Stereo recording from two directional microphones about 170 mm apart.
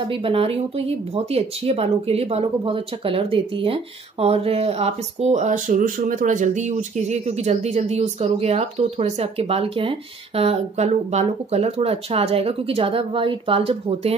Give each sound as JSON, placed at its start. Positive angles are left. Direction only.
{"t": 0.1, "sound": "speech", "side_deg": -30}